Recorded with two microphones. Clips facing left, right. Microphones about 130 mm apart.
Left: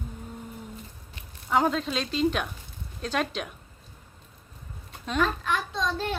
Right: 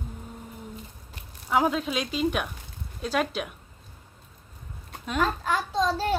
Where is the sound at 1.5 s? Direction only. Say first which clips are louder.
Even; 5° right (ahead or behind).